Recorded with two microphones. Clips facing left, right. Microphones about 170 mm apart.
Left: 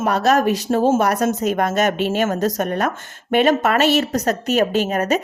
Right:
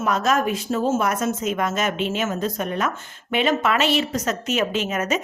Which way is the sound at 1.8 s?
50° left (ahead or behind).